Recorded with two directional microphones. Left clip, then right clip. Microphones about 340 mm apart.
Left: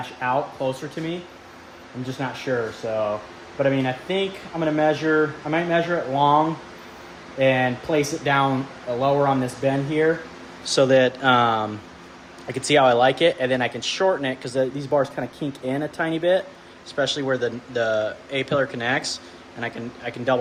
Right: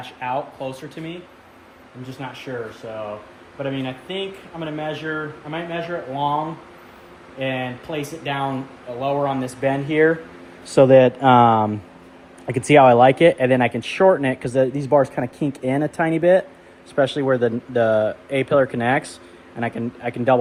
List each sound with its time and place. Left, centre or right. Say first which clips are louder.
0.2 s speech: left 2 dB; centre
2.5 s speech: left 7 dB; centre
7.3 s speech: left 6 dB; centre
9.6 s speech: right 4 dB; right